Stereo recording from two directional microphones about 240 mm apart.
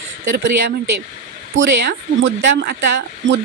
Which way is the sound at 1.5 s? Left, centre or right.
Right.